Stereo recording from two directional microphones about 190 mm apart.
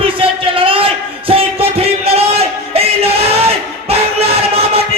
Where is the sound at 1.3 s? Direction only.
30° right (ahead or behind).